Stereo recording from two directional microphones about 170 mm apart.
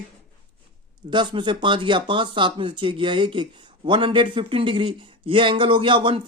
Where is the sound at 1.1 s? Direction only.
25° right (ahead or behind).